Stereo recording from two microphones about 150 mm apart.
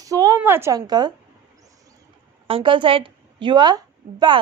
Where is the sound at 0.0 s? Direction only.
25° right (ahead or behind).